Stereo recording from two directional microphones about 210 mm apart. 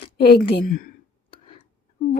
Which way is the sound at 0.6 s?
40° left (ahead or behind).